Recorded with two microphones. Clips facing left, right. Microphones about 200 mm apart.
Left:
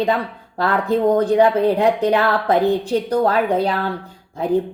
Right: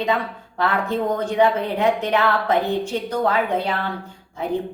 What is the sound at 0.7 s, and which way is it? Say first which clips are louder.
A woman's voice: left 7 dB; 35° left (ahead or behind).